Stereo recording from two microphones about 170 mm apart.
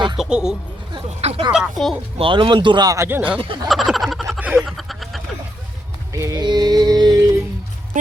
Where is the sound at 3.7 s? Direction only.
Centre (ahead or behind).